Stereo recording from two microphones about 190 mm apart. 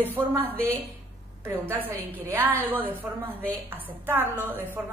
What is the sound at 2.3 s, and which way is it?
A woman's voice, 10° right (ahead or behind).